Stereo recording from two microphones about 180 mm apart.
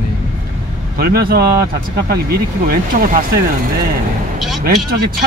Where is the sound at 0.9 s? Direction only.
60° right (ahead or behind).